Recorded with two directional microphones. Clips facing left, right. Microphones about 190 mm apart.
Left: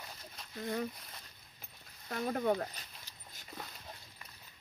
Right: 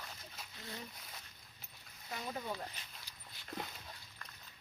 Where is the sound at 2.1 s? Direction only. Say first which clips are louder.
Left 10 dB; 55° left (ahead or behind).